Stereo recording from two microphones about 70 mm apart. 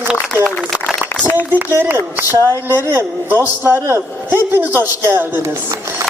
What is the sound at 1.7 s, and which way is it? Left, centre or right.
A man's voice, right.